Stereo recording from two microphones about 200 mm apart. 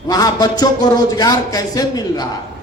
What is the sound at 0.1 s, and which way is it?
A man's voice, 20° left (ahead or behind).